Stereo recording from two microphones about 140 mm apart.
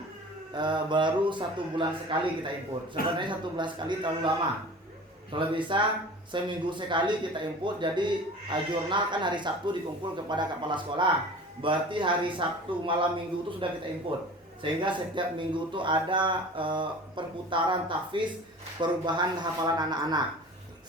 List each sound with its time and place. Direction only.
0.5 s a man's voice: 35° right (ahead or behind)
5.3 s a man's voice: 35° right (ahead or behind)